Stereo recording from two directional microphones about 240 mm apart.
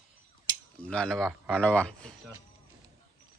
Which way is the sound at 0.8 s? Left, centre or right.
Centre.